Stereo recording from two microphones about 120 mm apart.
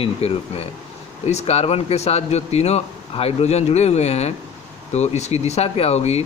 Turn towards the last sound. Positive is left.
turn(degrees=60)  # may be behind; listen again after turning